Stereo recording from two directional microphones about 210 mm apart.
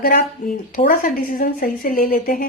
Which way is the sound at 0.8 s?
40° left (ahead or behind).